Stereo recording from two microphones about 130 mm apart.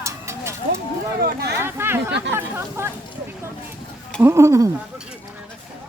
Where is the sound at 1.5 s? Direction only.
20° right (ahead or behind).